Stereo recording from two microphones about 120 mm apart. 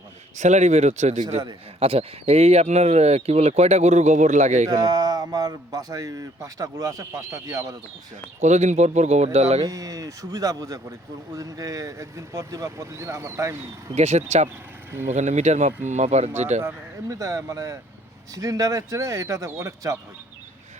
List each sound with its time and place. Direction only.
0.3 s speech: 75° right (ahead or behind)
1.8 s speech: 55° right (ahead or behind); by 4.7 s 80° right
4.7 s speech: 30° right (ahead or behind)
8.4 s speech: 75° right (ahead or behind)
9.6 s speech: 30° right (ahead or behind)
13.9 s speech: 65° right (ahead or behind)
16.6 s speech: 25° right (ahead or behind)